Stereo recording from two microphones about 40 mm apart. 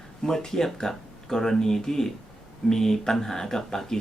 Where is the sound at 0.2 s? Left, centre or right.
Centre.